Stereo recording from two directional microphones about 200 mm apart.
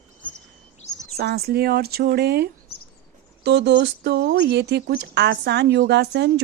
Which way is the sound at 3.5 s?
60° right (ahead or behind).